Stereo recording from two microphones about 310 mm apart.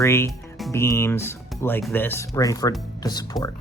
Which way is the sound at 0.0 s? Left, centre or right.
Centre.